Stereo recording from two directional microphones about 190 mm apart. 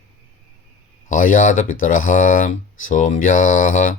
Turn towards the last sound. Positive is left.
turn(degrees=45)  # may be behind; listen again after turning